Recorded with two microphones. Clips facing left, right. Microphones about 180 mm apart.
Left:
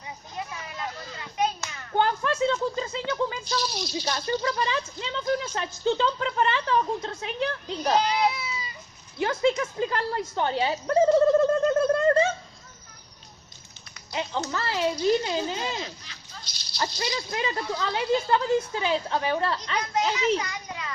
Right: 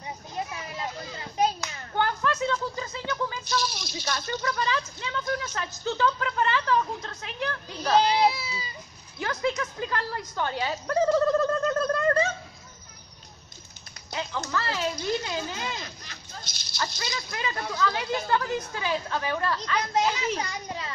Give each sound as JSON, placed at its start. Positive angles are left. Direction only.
{"t": 1.4, "sound": "hands", "side_deg": -35}
{"t": 2.0, "sound": "a sound", "side_deg": 20}
{"t": 4.0, "sound": "speech", "side_deg": 25}
{"t": 8.0, "sound": "speech", "side_deg": -30}
{"t": 9.2, "sound": "a woman's voice", "side_deg": 25}
{"t": 14.1, "sound": "speech", "side_deg": 25}
{"t": 19.9, "sound": "a sound", "side_deg": -35}